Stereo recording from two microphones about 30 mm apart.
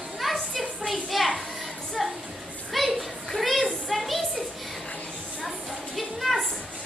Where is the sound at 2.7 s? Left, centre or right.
Centre.